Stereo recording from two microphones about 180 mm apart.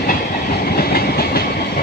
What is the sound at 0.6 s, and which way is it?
Train, 60° left (ahead or behind).